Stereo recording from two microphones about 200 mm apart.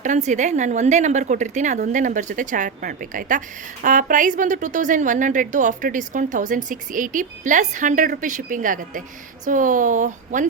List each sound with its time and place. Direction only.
0.0 s a woman's voice: 35° right (ahead or behind)